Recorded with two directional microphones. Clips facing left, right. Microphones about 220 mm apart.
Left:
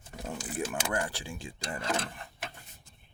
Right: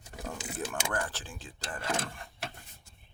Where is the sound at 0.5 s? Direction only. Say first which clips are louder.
Left 3 dB; 10° left (ahead or behind).